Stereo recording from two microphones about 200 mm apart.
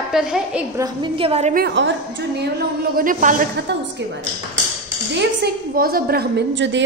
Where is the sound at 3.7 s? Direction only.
60° right (ahead or behind).